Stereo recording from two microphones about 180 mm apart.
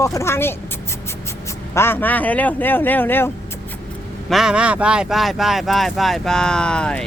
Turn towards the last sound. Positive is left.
turn(degrees=5)  # may be behind; listen again after turning